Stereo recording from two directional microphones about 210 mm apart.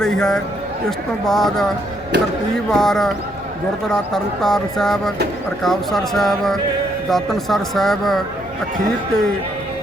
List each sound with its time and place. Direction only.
0.0 s a sound: 5° left (ahead or behind)
0.9 s speech: centre (ahead or behind)
2.1 s speech: 55° right (ahead or behind)
2.6 s speech: centre (ahead or behind)